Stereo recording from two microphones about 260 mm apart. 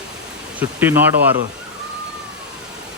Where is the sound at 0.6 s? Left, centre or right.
Centre.